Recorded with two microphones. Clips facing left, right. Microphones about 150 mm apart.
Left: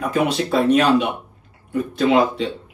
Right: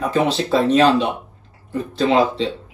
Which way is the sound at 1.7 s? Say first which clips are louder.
Even; 30° right (ahead or behind).